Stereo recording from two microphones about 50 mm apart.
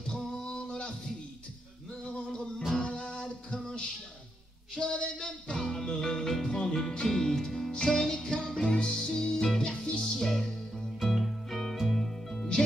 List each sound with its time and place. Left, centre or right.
0.0 s male singing: centre
2.8 s music: centre
4.7 s a sound: centre
5.1 s music: centre